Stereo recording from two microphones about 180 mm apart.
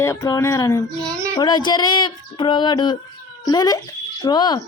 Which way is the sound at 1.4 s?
25° left (ahead or behind).